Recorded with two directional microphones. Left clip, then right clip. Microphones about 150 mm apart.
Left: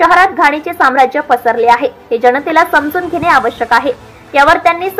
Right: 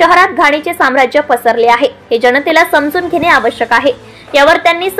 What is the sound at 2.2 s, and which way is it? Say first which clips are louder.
A woman's voice: right 1 dB; 30° right (ahead or behind).